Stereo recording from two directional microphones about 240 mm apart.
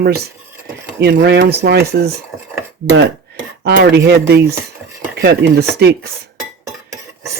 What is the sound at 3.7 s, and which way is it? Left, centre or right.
Speech, right.